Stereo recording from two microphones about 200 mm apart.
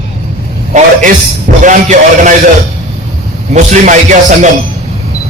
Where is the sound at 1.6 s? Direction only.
40° right (ahead or behind).